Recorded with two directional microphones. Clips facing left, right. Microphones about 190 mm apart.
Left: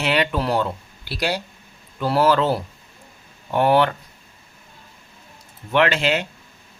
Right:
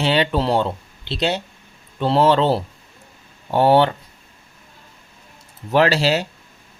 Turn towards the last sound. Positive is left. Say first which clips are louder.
# right 2 dB
turn(degrees=-35)  # may be behind; listen again after turning